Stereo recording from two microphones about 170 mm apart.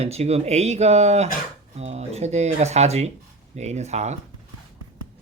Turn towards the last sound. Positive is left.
turn(degrees=-40)  # may be behind; listen again after turning